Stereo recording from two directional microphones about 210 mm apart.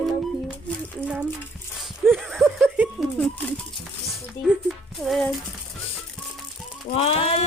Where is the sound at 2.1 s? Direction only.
Centre (ahead or behind).